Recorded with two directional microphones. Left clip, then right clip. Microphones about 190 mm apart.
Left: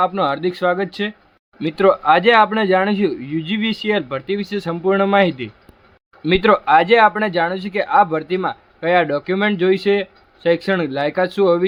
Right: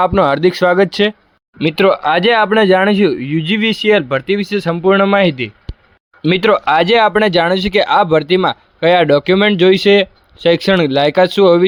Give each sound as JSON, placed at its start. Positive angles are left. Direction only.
{"t": 0.0, "sound": "speech", "side_deg": -45}